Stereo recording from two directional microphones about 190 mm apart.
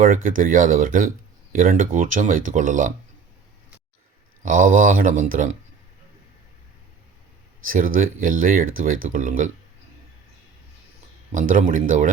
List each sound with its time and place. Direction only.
0.0 s speech: 45° right (ahead or behind)
4.4 s speech: 45° right (ahead or behind)
7.9 s speech: 45° right (ahead or behind)
11.3 s speech: 45° right (ahead or behind)